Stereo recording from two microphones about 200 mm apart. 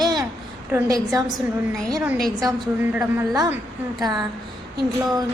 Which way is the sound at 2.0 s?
Centre (ahead or behind).